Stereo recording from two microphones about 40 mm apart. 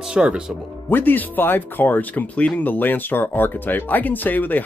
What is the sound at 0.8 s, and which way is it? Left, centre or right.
Speech, left.